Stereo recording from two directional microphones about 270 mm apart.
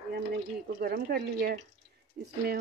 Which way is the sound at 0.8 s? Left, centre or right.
Right.